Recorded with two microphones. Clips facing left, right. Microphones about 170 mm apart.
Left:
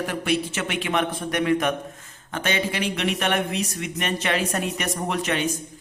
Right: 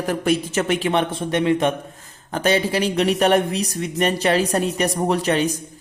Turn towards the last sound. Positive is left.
turn(degrees=-35)  # may be behind; listen again after turning